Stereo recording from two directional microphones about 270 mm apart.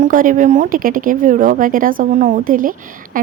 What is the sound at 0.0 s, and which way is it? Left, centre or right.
Speech, right.